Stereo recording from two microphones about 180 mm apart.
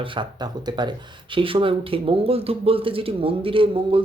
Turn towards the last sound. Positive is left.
turn(degrees=-30)  # may be behind; listen again after turning